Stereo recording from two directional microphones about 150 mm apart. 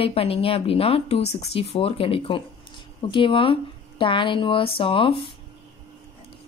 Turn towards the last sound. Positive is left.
turn(degrees=35)  # may be behind; listen again after turning